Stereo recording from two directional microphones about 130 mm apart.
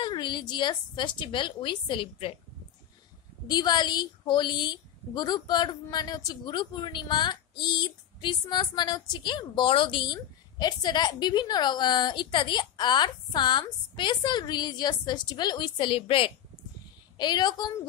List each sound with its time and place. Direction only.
0.0 s a woman's voice: 35° left (ahead or behind)
3.4 s a woman's voice: 30° left (ahead or behind)